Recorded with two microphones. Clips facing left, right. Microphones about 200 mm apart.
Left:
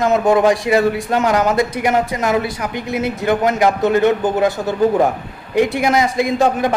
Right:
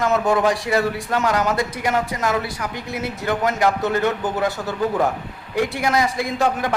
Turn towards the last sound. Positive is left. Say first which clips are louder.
# left 5 dB
turn(degrees=20)  # may be behind; listen again after turning